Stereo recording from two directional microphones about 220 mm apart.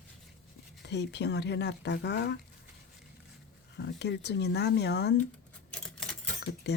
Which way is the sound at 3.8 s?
50° left (ahead or behind).